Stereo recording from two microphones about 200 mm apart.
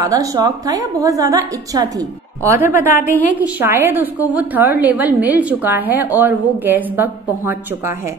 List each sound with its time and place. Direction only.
0.0 s a woman's voice: 15° right (ahead or behind)